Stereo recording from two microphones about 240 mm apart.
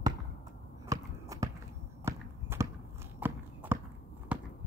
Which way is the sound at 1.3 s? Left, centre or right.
Centre.